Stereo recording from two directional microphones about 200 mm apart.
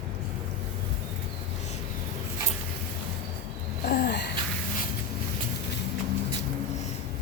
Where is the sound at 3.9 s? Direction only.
50° left (ahead or behind).